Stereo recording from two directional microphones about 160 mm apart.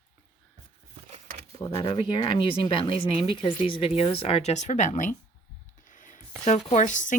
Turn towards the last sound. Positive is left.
turn(degrees=50)  # may be behind; listen again after turning